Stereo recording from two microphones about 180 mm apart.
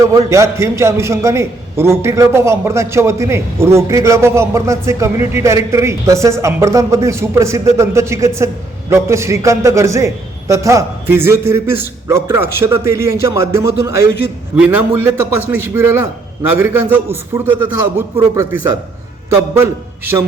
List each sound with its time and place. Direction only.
0.0 s a man's voice: 15° right (ahead or behind)